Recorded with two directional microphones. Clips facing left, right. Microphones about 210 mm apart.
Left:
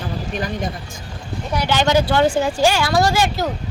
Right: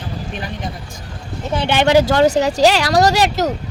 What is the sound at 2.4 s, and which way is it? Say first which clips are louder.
Speech: right 3 dB; 80° right.